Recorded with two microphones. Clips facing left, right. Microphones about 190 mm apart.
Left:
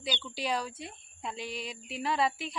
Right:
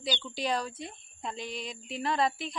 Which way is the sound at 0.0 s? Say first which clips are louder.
Right 2 dB; 5° left (ahead or behind).